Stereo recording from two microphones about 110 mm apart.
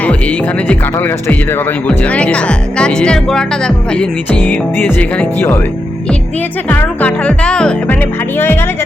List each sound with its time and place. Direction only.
0.0 s speech: 15° left (ahead or behind)
6.7 s speech: 15° left (ahead or behind)
8.4 s speech: 20° left (ahead or behind)